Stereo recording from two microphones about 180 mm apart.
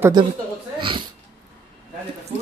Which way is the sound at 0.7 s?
25° right (ahead or behind).